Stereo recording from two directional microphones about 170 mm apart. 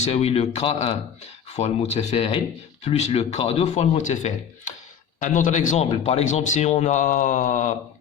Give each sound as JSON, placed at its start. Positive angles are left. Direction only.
{"t": 0.0, "sound": "a man's voice", "side_deg": 35}